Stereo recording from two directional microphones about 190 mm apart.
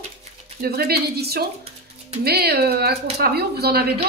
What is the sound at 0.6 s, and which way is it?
Speech, 55° right (ahead or behind).